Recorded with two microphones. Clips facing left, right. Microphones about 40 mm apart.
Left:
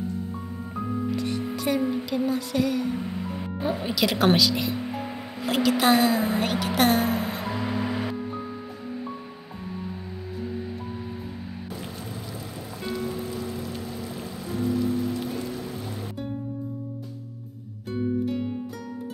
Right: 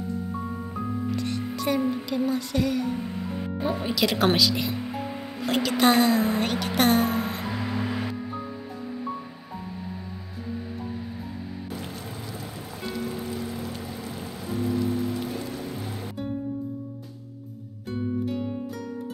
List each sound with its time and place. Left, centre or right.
1.1 s speech: centre
11.7 s music: centre
17.8 s music: centre